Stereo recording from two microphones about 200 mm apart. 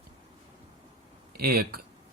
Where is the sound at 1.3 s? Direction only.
50° right (ahead or behind).